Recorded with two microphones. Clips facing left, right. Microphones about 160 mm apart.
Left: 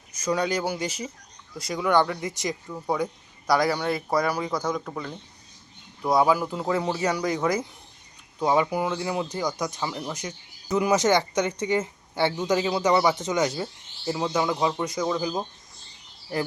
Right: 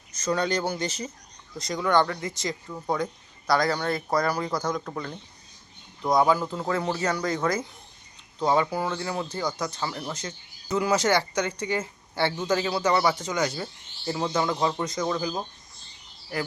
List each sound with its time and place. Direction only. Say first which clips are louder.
0.1 s speech: left 1 dB; 10° left (ahead or behind)
14.1 s speech: left 1 dB; 10° left (ahead or behind)